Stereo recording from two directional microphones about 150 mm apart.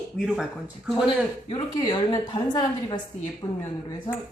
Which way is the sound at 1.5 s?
30° left (ahead or behind).